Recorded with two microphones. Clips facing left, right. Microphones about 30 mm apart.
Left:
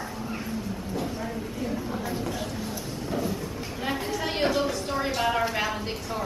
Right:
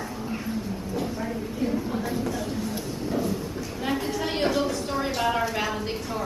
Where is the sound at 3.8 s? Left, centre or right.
Centre.